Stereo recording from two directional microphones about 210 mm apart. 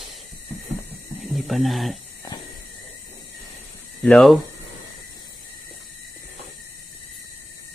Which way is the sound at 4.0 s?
5° left (ahead or behind).